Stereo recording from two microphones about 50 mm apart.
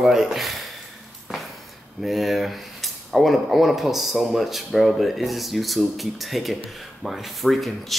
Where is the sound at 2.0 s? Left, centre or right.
Centre.